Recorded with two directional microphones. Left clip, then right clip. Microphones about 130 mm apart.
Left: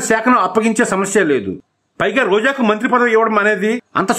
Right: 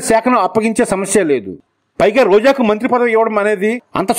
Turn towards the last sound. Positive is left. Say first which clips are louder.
# even
turn(degrees=-35)  # may be behind; listen again after turning